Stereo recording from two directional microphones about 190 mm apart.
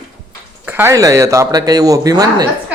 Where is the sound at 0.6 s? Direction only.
10° right (ahead or behind).